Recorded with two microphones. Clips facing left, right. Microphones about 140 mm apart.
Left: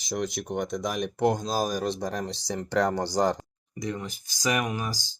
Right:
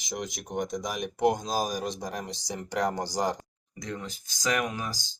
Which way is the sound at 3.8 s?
5° left (ahead or behind).